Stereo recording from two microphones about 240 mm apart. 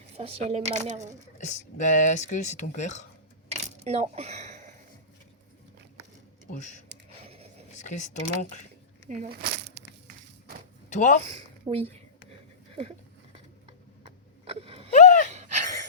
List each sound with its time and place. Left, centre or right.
0.2 s speech: right
1.5 s speech: left
3.5 s coin: right
6.5 s speech: left
7.7 s a sound: left
8.1 s speech: left
9.0 s a sound: right
10.8 s speech: left
11.2 s speech: right
14.4 s wail: right
14.9 s gasp: left
15.3 s a sound: right